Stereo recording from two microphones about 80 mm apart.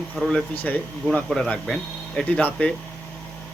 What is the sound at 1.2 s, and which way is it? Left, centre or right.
Speech, centre.